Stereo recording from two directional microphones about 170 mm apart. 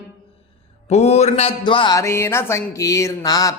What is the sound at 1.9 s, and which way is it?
Speech, 15° left (ahead or behind).